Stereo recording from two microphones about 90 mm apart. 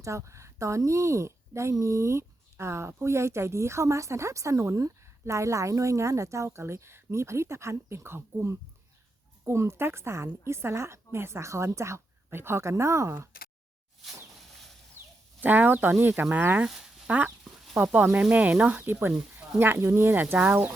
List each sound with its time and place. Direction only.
0.0 s a woman's voice: 35° right (ahead or behind)
15.4 s a woman's voice: 20° right (ahead or behind)
18.8 s a woman's voice: 25° right (ahead or behind)